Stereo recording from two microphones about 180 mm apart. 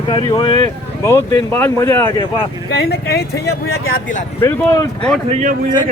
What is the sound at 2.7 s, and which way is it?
Speech, 60° left (ahead or behind).